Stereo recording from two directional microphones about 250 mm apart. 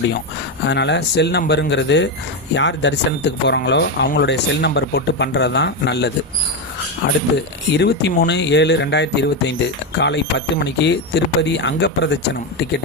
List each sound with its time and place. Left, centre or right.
0.6 s speech: left